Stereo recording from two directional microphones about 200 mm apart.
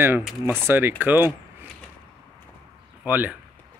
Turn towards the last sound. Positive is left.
turn(degrees=-10)  # may be behind; listen again after turning